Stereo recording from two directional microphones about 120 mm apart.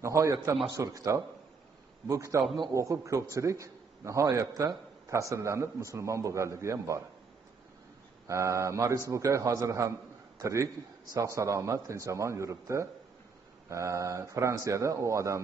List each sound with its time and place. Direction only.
0.0 s a man's voice: 25° right (ahead or behind)
8.3 s a man's voice: 25° right (ahead or behind)